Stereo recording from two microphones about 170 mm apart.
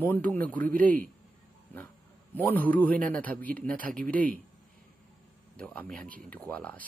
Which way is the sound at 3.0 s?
10° left (ahead or behind).